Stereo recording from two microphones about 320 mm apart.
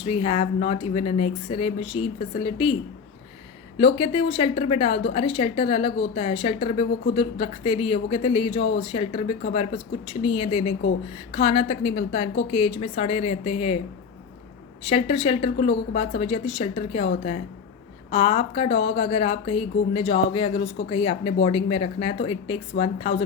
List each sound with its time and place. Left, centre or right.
0.0 s a woman's voice: centre
3.8 s a woman's voice: centre
14.8 s a woman's voice: centre
18.1 s a woman's voice: centre